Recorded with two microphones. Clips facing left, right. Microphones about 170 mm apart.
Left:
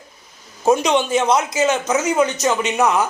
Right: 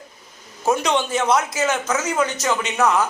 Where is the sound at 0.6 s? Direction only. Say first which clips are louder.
Left 4 dB; 15° left (ahead or behind).